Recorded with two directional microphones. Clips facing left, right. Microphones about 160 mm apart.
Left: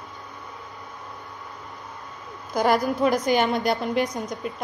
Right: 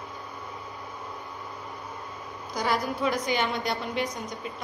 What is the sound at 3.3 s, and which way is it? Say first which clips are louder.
Speech: left 6 dB; 50° left (ahead or behind).